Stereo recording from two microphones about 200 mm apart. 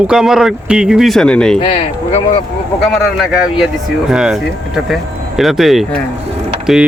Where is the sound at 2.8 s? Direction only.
Centre (ahead or behind).